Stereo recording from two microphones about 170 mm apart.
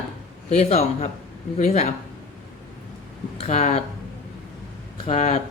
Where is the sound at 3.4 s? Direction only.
40° left (ahead or behind).